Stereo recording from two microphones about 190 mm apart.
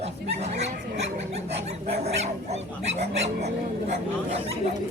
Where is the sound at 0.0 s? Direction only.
35° right (ahead or behind).